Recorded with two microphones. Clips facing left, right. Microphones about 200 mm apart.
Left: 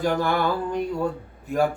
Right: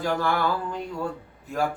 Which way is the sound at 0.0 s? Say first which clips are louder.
Left 2 dB; 20° left (ahead or behind).